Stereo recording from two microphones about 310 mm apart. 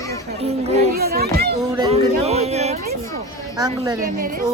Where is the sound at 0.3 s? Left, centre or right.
Centre.